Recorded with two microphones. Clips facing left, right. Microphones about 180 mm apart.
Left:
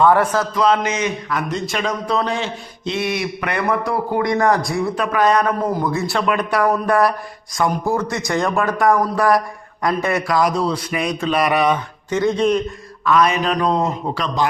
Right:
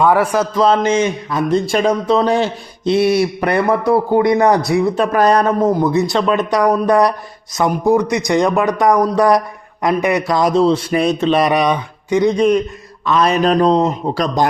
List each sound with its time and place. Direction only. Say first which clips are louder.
0.0 s a man's voice: right 1 dB; 10° right (ahead or behind)
0.3 s a man's voice: right 3 dB; 25° right (ahead or behind)
5.1 s a man's voice: right 2 dB; 35° right (ahead or behind); by 12.5 s 15° right (ahead or behind)
13.1 s mantra: right 3 dB; 30° right (ahead or behind)
13.7 s a man's voice: right 5 dB; 20° right (ahead or behind)
14.1 s mantra: right 5 dB; 40° right (ahead or behind)